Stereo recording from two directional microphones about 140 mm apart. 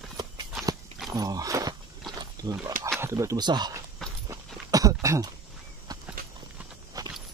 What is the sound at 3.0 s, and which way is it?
Speech, 20° right (ahead or behind).